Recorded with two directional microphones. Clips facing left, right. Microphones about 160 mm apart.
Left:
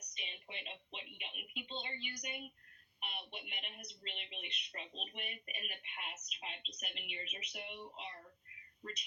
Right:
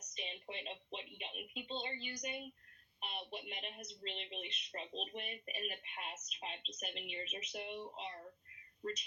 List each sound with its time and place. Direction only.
0.1 s a woman's voice: 40° right (ahead or behind)